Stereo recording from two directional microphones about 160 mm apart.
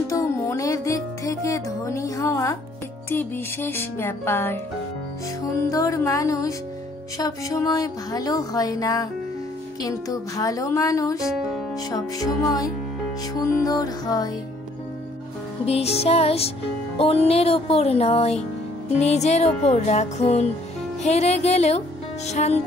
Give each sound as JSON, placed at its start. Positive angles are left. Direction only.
{"t": 0.1, "sound": "music", "side_deg": 20}
{"t": 5.7, "sound": "a sound", "side_deg": 20}
{"t": 15.6, "sound": "music", "side_deg": 40}